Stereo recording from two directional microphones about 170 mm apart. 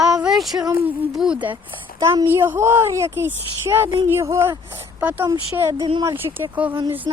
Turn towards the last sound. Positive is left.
turn(degrees=-25)  # may be behind; listen again after turning